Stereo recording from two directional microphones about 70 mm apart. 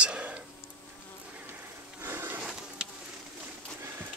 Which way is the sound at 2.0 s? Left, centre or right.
Right.